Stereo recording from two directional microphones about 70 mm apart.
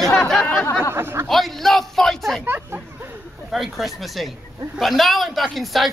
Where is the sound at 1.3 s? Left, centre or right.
Centre.